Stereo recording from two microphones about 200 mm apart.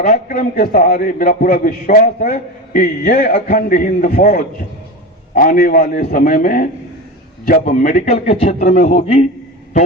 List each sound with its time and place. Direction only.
0.0 s a man's voice: 40° left (ahead or behind)